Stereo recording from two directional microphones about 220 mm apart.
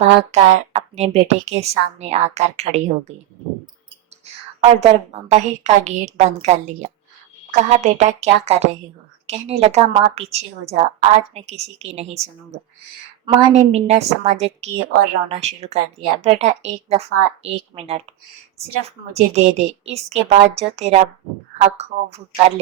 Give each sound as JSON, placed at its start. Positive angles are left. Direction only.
{"t": 0.0, "sound": "speech", "side_deg": -30}
{"t": 4.6, "sound": "a woman's voice", "side_deg": -30}